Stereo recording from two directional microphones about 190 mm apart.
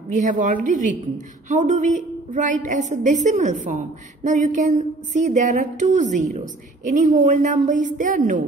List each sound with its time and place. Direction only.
0.1 s a woman's voice: 40° right (ahead or behind)